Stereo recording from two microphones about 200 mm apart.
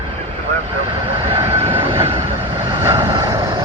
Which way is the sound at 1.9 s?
25° right (ahead or behind).